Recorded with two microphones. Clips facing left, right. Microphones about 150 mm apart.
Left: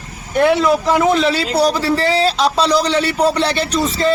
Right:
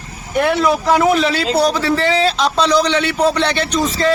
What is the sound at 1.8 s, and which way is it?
A man's voice, 35° left (ahead or behind).